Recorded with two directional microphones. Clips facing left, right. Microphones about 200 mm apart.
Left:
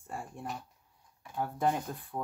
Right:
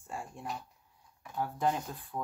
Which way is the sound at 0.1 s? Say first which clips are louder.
Even; 50° left (ahead or behind).